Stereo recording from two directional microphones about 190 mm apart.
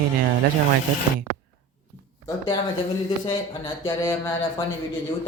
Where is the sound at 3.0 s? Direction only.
25° left (ahead or behind).